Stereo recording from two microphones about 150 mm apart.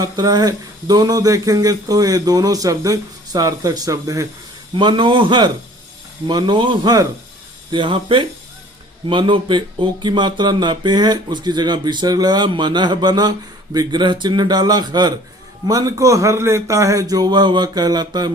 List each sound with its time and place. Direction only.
0.0 s speech: 25° right (ahead or behind)